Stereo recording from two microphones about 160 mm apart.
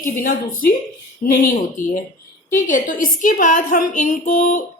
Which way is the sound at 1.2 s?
55° left (ahead or behind).